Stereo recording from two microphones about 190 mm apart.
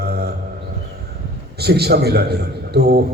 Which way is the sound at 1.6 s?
55° right (ahead or behind).